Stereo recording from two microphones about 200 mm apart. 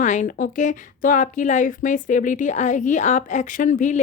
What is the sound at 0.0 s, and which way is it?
Speech, 40° left (ahead or behind).